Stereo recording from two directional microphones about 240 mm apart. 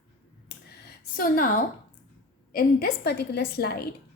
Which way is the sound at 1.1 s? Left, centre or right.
Left.